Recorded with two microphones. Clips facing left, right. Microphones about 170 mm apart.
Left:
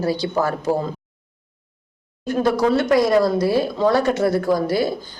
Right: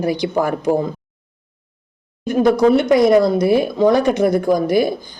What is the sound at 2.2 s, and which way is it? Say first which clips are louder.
Speech: right 5 dB; 15° right (ahead or behind).